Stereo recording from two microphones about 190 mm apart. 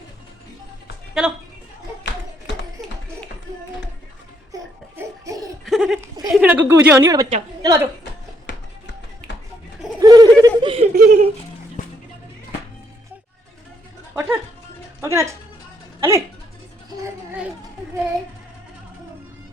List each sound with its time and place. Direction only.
1.2 s a woman's voice: 5° right (ahead or behind)
4.5 s laughter: 15° right (ahead or behind)
5.6 s a sound: centre (ahead or behind)
6.0 s a woman's voice: 15° right (ahead or behind)
8.5 s music: 65° left (ahead or behind)
10.0 s a sound: 20° right (ahead or behind)
10.6 s chuckle: 30° right (ahead or behind)
10.9 s speech: 50° right (ahead or behind)
11.8 s music: 40° left (ahead or behind)
14.1 s music: 10° right (ahead or behind)
15.0 s speech: 15° right (ahead or behind)